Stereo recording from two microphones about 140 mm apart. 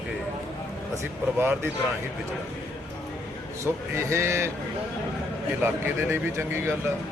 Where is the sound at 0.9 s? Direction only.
15° right (ahead or behind).